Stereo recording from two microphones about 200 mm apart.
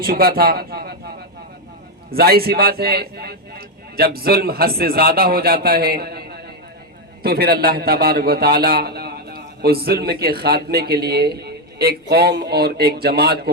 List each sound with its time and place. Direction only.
0.0 s a man's voice: 50° right (ahead or behind)